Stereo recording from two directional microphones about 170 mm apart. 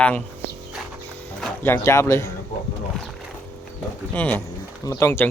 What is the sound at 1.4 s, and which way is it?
Speech, 5° left (ahead or behind).